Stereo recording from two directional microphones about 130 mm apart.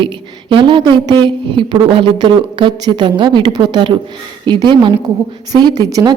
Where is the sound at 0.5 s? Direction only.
35° right (ahead or behind).